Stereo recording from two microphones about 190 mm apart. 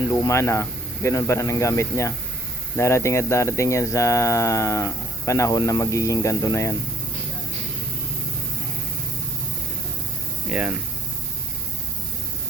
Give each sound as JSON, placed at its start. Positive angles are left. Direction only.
{"t": 0.1, "sound": "speech", "side_deg": 15}
{"t": 10.5, "sound": "speech", "side_deg": -5}